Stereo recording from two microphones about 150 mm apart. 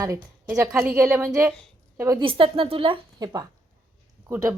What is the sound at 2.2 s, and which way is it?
A woman's voice, 35° right (ahead or behind).